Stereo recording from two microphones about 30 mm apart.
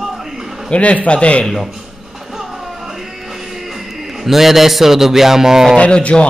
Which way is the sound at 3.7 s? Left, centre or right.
Centre.